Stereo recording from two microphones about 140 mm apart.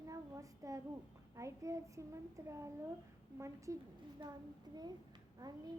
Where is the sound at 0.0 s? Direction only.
25° right (ahead or behind).